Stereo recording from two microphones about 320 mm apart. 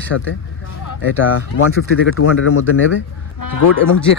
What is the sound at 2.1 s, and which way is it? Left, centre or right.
Speech, left.